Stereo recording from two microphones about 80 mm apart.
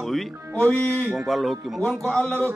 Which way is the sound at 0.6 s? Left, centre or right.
Centre.